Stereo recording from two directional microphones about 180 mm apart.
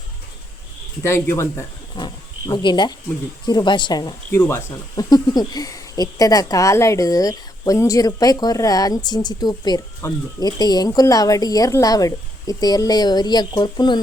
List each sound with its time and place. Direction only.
1.0 s speech: 15° left (ahead or behind)
4.3 s speech: 15° left (ahead or behind)